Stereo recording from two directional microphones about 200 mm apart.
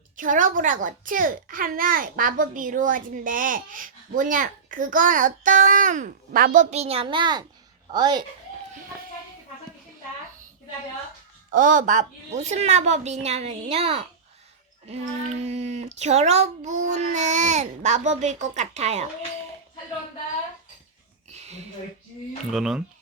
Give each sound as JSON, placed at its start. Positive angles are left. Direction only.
{"t": 0.2, "sound": "a child's voice", "side_deg": -40}
{"t": 11.5, "sound": "a child's voice", "side_deg": -40}
{"t": 15.4, "sound": "a child's voice", "side_deg": -35}
{"t": 21.3, "sound": "a sound", "side_deg": -35}
{"t": 22.5, "sound": "speech", "side_deg": -5}